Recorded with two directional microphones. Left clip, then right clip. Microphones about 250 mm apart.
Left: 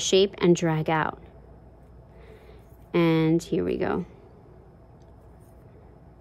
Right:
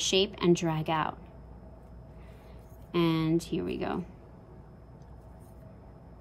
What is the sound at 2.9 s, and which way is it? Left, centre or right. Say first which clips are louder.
Speech: left 6 dB; left.